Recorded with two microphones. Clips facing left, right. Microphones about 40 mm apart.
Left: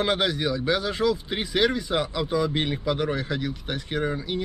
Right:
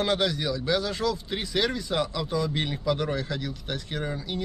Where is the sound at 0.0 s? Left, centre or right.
Centre.